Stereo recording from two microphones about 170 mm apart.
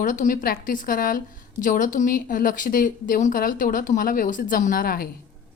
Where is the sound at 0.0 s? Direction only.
50° left (ahead or behind).